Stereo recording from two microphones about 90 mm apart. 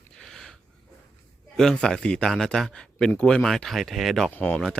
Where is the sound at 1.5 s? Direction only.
10° left (ahead or behind).